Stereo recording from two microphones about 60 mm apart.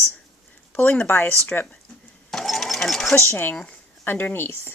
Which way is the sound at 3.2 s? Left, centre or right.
Left.